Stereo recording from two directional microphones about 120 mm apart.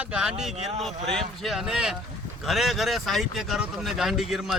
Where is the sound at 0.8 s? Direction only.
Centre (ahead or behind).